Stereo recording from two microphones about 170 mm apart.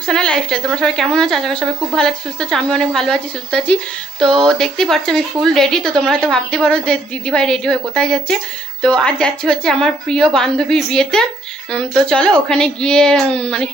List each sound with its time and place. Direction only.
0.0 s speech: 5° left (ahead or behind)